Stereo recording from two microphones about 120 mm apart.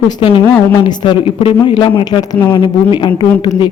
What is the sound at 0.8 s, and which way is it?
A woman's voice, 40° left (ahead or behind).